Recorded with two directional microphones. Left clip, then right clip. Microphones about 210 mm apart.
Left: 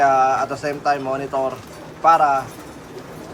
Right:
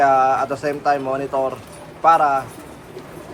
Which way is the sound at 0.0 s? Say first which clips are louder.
Right 1 dB; 5° left (ahead or behind).